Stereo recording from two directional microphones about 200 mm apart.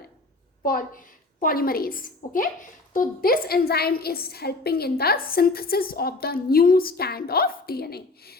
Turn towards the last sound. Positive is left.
turn(degrees=50)  # may be behind; listen again after turning